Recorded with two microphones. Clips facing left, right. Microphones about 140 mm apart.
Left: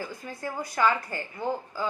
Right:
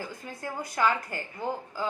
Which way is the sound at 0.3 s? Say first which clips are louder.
Left 2 dB; 15° right (ahead or behind).